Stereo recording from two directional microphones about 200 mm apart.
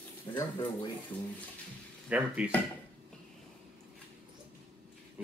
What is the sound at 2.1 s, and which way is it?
Speech, 5° right (ahead or behind).